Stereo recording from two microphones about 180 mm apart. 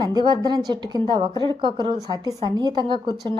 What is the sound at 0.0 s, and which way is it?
Speech, 25° right (ahead or behind).